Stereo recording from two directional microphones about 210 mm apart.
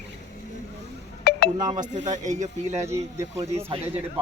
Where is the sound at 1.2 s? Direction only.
50° left (ahead or behind).